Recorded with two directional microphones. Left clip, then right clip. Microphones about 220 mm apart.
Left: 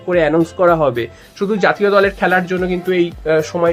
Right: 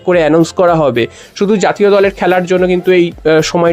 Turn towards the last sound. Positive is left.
turn(degrees=-40)  # may be behind; listen again after turning